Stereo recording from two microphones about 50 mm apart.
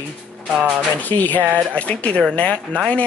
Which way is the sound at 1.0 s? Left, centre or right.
Left.